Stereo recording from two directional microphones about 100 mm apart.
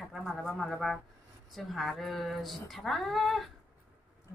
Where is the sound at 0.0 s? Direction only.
Centre (ahead or behind).